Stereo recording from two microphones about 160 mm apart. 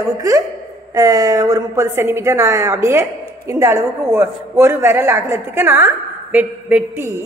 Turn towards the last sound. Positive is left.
turn(degrees=-15)  # may be behind; listen again after turning